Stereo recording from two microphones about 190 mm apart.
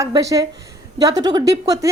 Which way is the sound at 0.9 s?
20° right (ahead or behind).